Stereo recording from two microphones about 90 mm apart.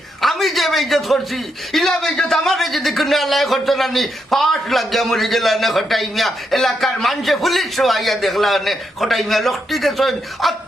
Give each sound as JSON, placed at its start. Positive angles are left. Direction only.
{"t": 0.2, "sound": "a man's voice", "side_deg": 0}